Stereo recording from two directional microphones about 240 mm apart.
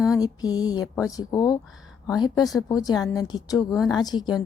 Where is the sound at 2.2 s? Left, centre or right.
Centre.